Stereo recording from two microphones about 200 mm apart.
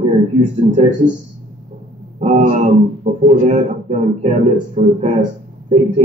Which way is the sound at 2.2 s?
35° right (ahead or behind).